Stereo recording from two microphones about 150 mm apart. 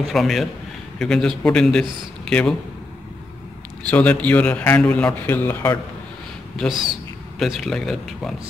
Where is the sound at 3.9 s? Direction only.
10° left (ahead or behind).